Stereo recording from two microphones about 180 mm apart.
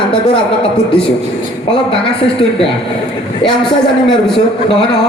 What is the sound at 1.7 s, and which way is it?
Speech, 30° left (ahead or behind).